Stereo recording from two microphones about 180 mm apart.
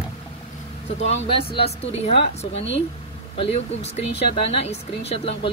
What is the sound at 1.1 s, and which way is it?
A woman's voice, 35° left (ahead or behind).